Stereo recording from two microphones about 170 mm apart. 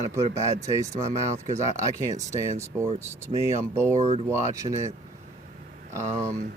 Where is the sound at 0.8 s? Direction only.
20° right (ahead or behind).